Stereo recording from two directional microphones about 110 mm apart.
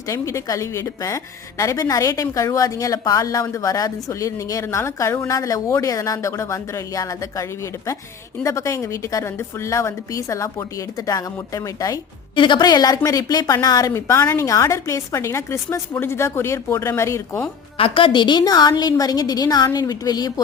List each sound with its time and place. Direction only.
0.1 s a woman's voice: 30° left (ahead or behind)
12.4 s a woman's voice: 40° left (ahead or behind); by 17.4 s 25° left (ahead or behind)
17.7 s a woman's voice: 55° left (ahead or behind); by 20.3 s 35° left (ahead or behind)